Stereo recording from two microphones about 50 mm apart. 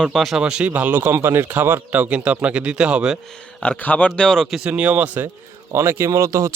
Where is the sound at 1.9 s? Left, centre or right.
Right.